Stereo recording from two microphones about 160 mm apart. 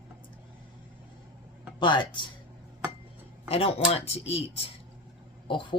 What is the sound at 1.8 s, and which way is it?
Speech, 30° left (ahead or behind).